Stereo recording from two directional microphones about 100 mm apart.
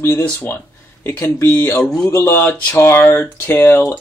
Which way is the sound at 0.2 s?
20° left (ahead or behind).